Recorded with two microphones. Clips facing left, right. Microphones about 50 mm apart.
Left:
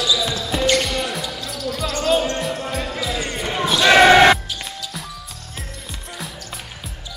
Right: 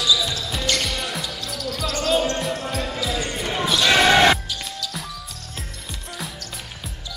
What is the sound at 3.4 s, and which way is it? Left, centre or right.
Basketball bounce, centre.